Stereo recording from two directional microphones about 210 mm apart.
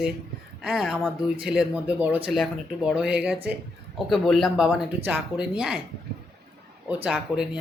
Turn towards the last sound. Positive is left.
turn(degrees=0)  # may be behind; listen again after turning